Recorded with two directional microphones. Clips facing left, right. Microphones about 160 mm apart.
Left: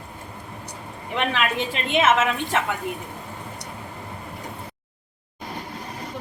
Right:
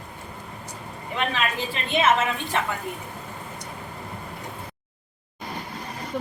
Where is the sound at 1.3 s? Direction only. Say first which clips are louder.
Left 3 dB; 85° left.